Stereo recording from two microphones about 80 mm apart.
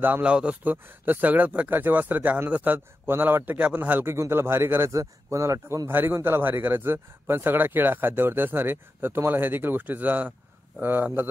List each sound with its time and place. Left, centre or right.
0.0 s speech: centre
0.8 s speech: right
4.9 s speech: right
5.9 s speech: right